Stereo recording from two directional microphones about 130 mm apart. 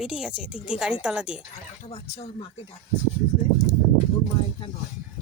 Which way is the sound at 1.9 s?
50° left (ahead or behind).